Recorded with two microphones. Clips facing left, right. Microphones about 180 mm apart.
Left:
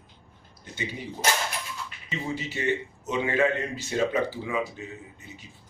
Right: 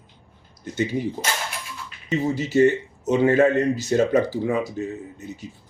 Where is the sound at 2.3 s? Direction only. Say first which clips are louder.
Right 12 dB; 40° right (ahead or behind).